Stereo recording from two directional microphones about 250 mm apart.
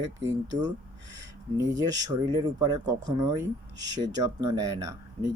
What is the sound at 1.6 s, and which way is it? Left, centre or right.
Speech, centre.